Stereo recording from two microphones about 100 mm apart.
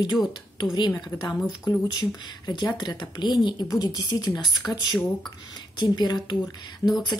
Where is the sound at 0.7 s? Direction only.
45° left (ahead or behind).